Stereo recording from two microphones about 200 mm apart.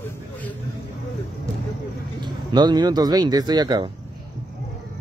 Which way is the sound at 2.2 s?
20° right (ahead or behind).